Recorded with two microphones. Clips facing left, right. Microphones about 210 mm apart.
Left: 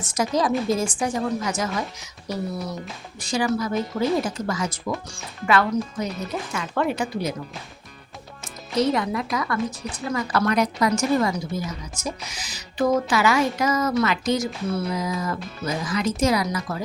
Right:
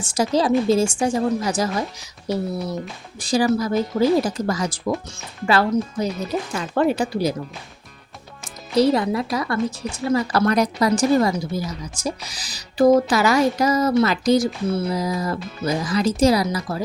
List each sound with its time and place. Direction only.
0.0 s a woman's voice: 30° right (ahead or behind)
8.7 s speech: 35° right (ahead or behind)